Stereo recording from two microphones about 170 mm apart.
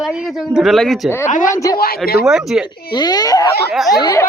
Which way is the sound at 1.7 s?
65° left (ahead or behind).